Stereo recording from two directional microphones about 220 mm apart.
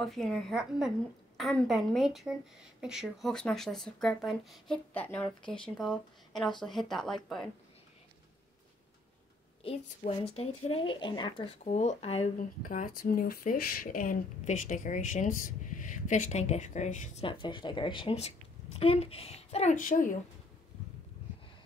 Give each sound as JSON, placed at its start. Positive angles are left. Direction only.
{"t": 0.0, "sound": "speech", "side_deg": 0}
{"t": 9.6, "sound": "speech", "side_deg": 25}